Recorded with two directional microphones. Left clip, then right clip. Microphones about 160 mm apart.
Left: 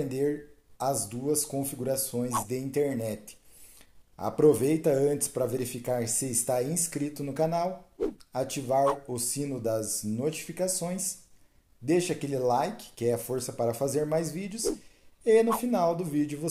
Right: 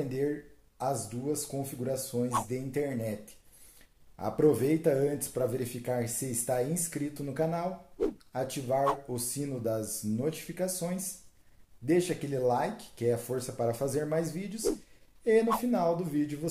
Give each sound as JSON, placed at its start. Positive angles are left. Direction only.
{"t": 0.7, "sound": "speech", "side_deg": 35}
{"t": 4.2, "sound": "speech", "side_deg": 25}